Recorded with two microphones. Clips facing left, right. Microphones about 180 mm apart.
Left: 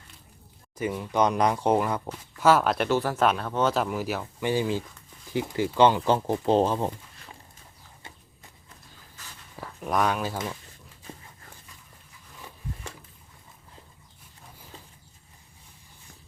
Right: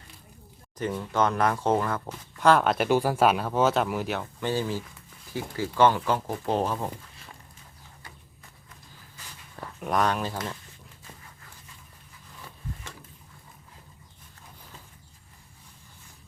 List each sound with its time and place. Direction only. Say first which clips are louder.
0.8 s speech: left 1 dB; 10° left (ahead or behind)
2.9 s speech: right 3 dB; 10° right (ahead or behind)
4.4 s speech: left 3 dB; 15° left (ahead or behind)
9.6 s speech: even; centre (ahead or behind)